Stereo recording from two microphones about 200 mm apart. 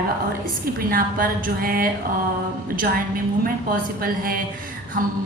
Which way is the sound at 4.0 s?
45° right (ahead or behind).